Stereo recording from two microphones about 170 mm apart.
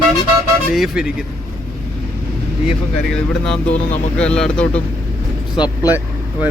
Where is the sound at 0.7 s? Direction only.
5° right (ahead or behind).